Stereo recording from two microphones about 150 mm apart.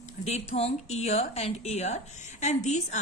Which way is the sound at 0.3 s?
45° left (ahead or behind).